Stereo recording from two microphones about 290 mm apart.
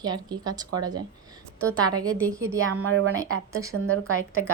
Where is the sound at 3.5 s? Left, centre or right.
Centre.